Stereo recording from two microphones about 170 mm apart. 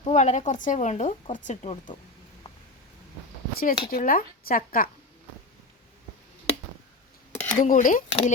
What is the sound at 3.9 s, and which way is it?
Speech, 55° left (ahead or behind).